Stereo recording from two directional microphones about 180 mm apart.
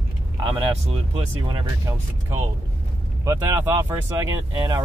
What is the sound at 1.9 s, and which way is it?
Speech, 15° right (ahead or behind).